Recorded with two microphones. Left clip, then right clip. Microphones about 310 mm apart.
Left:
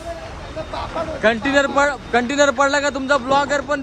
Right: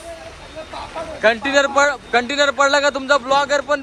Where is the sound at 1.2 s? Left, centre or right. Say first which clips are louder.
Right 2 dB; centre.